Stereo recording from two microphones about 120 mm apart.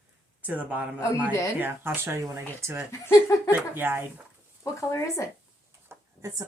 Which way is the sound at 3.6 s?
15° right (ahead or behind).